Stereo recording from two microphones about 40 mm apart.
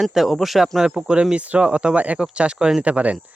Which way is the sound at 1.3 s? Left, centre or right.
Right.